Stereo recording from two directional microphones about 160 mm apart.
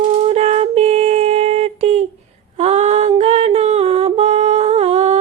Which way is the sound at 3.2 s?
40° right (ahead or behind).